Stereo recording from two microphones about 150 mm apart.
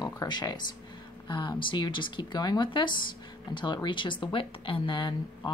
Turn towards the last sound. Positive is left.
turn(degrees=30)  # may be behind; listen again after turning